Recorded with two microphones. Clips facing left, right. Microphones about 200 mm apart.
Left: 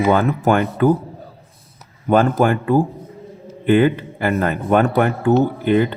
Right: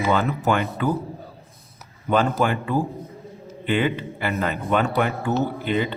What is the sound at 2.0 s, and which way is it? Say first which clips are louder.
Speech: left 6 dB; 50° left (ahead or behind).